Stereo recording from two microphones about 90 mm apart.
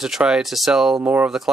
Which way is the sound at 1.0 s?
20° right (ahead or behind).